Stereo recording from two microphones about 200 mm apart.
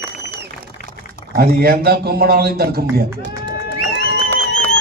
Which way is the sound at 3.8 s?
55° left (ahead or behind).